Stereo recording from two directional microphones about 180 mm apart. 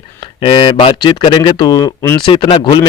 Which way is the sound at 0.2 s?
30° left (ahead or behind).